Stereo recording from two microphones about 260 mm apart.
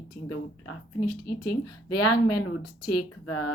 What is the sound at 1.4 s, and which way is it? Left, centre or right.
Speech, left.